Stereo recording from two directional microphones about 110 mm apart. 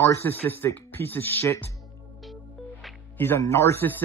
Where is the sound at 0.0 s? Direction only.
25° left (ahead or behind).